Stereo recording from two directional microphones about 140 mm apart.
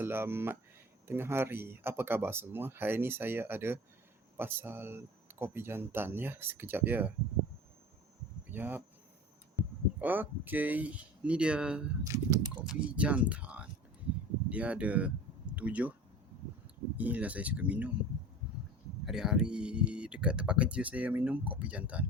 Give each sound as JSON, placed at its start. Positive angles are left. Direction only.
{"t": 0.0, "sound": "speech", "side_deg": -15}
{"t": 8.4, "sound": "speech", "side_deg": -15}
{"t": 10.0, "sound": "speech", "side_deg": -15}
{"t": 12.0, "sound": "a sound", "side_deg": -20}
{"t": 12.6, "sound": "speech", "side_deg": -10}
{"t": 17.0, "sound": "speech", "side_deg": -10}
{"t": 19.0, "sound": "speech", "side_deg": -5}